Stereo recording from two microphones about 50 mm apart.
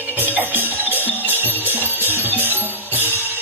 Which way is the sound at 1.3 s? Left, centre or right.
Right.